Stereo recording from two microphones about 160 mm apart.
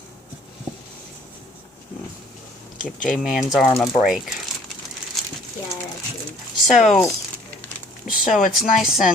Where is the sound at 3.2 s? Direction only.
5° right (ahead or behind).